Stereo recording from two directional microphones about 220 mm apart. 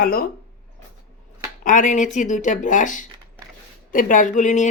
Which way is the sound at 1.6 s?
35° left (ahead or behind).